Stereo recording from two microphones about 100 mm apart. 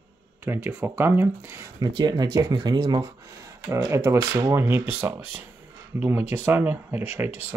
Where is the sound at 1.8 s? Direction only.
45° right (ahead or behind).